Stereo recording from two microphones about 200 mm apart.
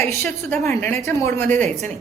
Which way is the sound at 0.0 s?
10° left (ahead or behind).